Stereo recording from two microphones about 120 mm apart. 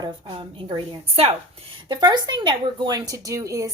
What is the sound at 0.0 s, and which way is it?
Speech, 40° right (ahead or behind).